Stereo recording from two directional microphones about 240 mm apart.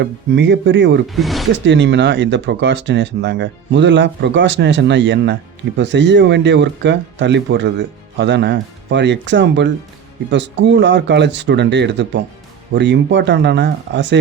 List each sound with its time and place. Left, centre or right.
0.0 s speech: right
1.0 s speech: centre
1.6 s speech: right